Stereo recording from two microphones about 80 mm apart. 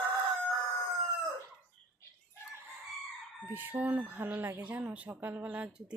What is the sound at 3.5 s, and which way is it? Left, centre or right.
Speech, right.